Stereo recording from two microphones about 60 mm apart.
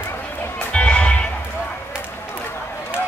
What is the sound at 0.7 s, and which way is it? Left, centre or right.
Music, centre.